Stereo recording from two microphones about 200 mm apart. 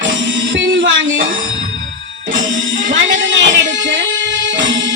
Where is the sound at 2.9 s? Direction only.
70° right (ahead or behind).